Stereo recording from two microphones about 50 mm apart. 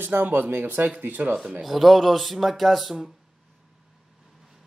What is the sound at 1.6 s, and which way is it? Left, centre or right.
Speech, centre.